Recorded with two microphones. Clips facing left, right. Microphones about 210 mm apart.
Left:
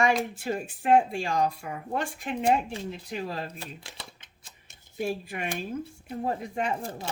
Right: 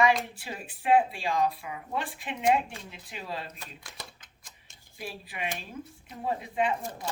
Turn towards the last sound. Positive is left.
turn(degrees=30)  # may be behind; listen again after turning